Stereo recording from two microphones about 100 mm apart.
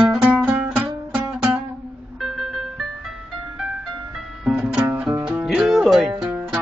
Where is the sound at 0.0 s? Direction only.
10° right (ahead or behind).